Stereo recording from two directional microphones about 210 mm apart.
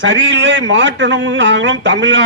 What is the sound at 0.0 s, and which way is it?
A man's voice, 60° right (ahead or behind).